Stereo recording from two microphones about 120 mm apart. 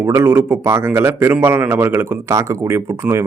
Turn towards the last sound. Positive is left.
turn(degrees=-20)  # may be behind; listen again after turning